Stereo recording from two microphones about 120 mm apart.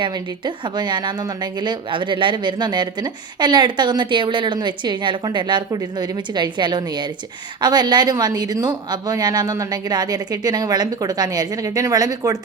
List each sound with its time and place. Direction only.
0.0 s a woman's voice: 40° right (ahead or behind)